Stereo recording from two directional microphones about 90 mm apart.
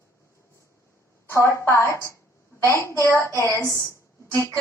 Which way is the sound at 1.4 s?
30° left (ahead or behind).